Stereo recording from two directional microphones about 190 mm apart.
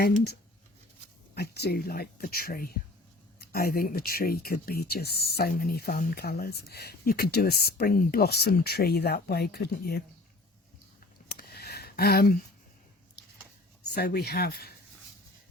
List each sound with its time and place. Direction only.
1.4 s speech: 60° left (ahead or behind)
11.3 s a sound: 55° left (ahead or behind)
13.8 s speech: 55° left (ahead or behind)